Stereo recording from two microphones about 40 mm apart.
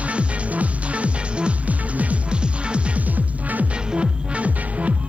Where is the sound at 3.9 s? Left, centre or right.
Right.